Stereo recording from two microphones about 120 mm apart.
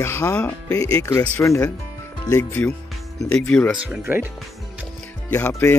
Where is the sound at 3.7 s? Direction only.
5° right (ahead or behind).